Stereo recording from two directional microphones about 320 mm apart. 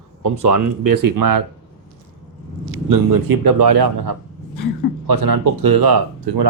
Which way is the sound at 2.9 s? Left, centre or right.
Right.